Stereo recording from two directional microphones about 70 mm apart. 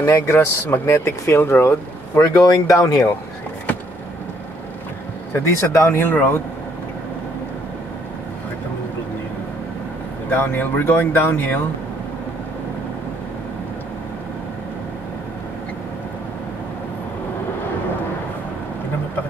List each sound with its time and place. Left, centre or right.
0.0 s speech: left
2.4 s speech: left
5.6 s speech: left
10.3 s speech: left